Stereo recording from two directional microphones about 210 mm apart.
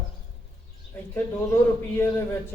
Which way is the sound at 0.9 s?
10° left (ahead or behind).